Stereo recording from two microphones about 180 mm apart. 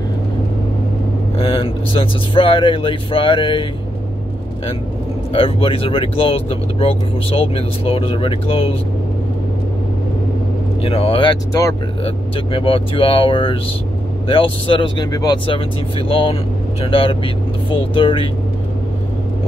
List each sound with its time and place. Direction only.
1.4 s speech: 30° left (ahead or behind)
5.3 s speech: 30° left (ahead or behind)
10.8 s speech: 30° left (ahead or behind)